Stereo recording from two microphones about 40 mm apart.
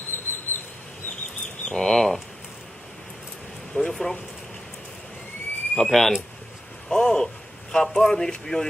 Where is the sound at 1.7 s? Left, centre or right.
Centre.